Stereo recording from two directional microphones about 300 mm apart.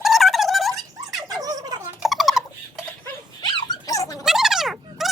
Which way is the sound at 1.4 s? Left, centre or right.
Centre.